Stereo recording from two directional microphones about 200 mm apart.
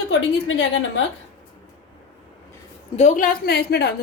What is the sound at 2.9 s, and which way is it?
A woman's voice, 35° left (ahead or behind).